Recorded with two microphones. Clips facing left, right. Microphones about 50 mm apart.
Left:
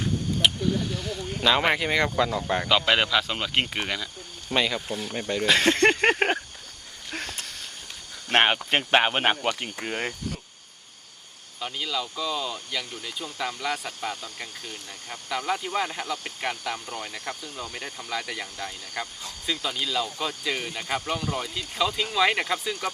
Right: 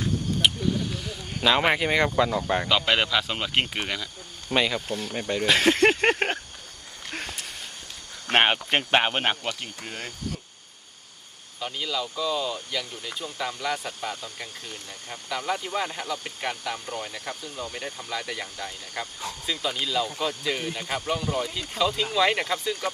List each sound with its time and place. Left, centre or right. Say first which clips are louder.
0.4 s speech: left 1 dB; centre
7.1 s a sound: left 1 dB; centre
8.3 s speech: even; centre
9.4 s speech: left 4 dB; left
11.6 s speech: even; centre